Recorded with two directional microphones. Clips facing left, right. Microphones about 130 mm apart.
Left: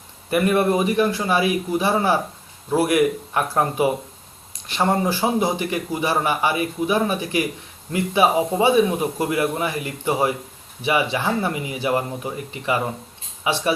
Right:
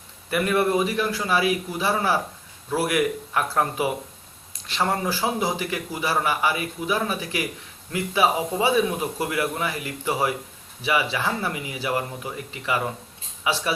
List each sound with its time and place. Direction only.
0.3 s a man's voice: 25° left (ahead or behind)